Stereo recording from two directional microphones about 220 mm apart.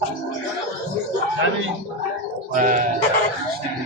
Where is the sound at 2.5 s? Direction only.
35° right (ahead or behind).